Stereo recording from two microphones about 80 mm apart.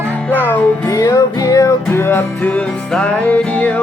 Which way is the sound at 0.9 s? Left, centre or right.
Left.